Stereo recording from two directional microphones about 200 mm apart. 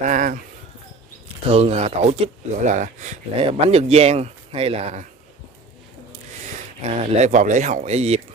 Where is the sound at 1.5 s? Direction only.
30° right (ahead or behind).